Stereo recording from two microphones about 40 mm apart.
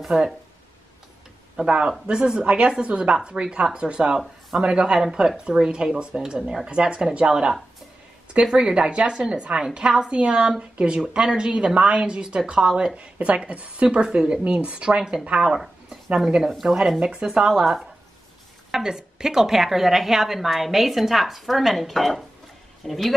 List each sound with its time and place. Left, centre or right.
0.1 s speech: centre
1.7 s a woman's voice: right
11.0 s a woman's voice: centre
12.9 s a woman's voice: right
14.0 s a woman's voice: centre
14.4 s a woman's voice: right
15.4 s speech: centre
17.5 s a woman's voice: centre